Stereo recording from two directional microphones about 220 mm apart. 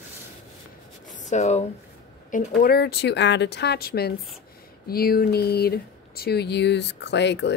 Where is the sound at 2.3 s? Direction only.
45° left (ahead or behind).